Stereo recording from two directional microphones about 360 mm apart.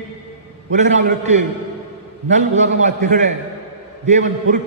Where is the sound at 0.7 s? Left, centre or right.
Centre.